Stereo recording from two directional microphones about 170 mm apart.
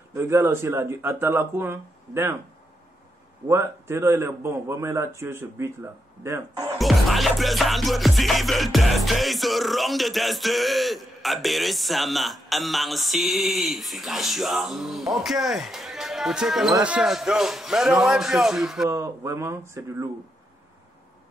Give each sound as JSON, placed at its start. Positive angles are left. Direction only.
{"t": 0.1, "sound": "a man's voice", "side_deg": -15}
{"t": 3.4, "sound": "a man's voice", "side_deg": -15}
{"t": 6.8, "sound": "music", "side_deg": 0}
{"t": 15.2, "sound": "speech", "side_deg": 0}
{"t": 16.8, "sound": "music", "side_deg": -5}
{"t": 18.9, "sound": "a man's voice", "side_deg": -15}